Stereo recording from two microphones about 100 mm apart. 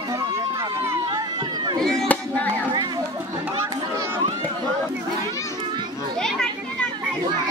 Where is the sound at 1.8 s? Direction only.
5° left (ahead or behind).